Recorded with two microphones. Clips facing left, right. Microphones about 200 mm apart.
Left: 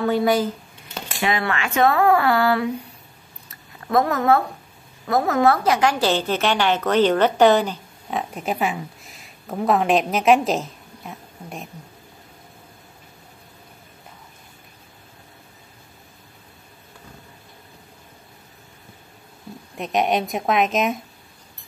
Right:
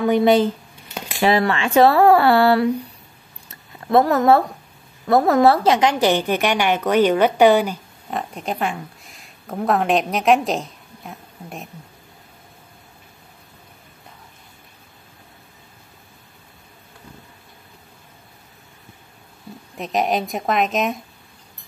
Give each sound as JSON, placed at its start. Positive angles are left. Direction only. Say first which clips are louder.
{"t": 0.0, "sound": "speech", "louder": "right 4 dB", "side_deg": -20}
{"t": 1.2, "sound": "speech", "louder": "right 6 dB", "side_deg": -35}
{"t": 3.4, "sound": "a sound", "louder": "right 3 dB", "side_deg": -30}
{"t": 5.1, "sound": "speech", "louder": "right 4 dB", "side_deg": -35}
{"t": 8.1, "sound": "speech", "louder": "left 1 dB", "side_deg": 0}
{"t": 19.8, "sound": "a woman's voice", "louder": "even", "side_deg": 0}